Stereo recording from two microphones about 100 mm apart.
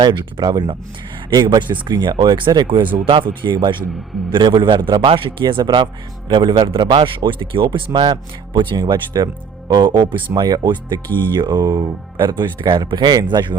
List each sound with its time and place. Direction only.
0.0 s speech: 50° right (ahead or behind)